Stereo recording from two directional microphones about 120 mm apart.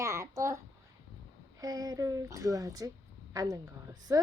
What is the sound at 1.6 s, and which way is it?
A child's voice, 30° right (ahead or behind).